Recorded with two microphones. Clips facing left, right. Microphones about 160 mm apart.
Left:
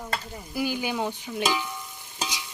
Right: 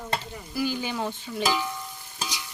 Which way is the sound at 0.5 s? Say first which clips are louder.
Left 1 dB; 15° left (ahead or behind).